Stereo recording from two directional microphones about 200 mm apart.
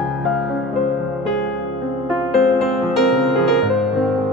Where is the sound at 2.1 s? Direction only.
Centre (ahead or behind).